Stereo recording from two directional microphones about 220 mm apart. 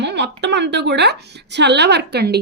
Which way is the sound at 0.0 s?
50° right (ahead or behind).